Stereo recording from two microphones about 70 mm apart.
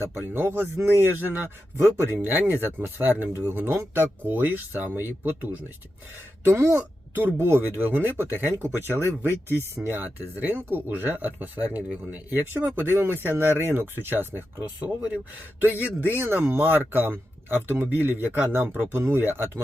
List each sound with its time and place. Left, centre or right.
0.0 s speech: right
12.3 s speech: right
14.8 s speech: centre
15.6 s speech: right